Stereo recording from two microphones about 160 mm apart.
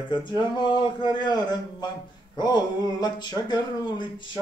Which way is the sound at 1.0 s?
25° left (ahead or behind).